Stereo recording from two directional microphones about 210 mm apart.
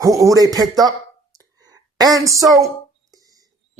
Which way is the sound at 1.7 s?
20° right (ahead or behind).